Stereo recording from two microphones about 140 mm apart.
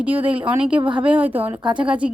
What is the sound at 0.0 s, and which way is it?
Speech, 10° right (ahead or behind).